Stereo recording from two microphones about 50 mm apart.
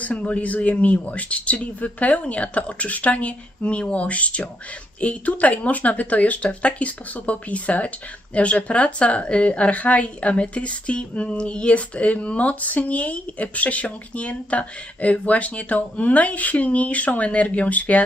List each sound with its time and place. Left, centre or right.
0.0 s a woman's voice: left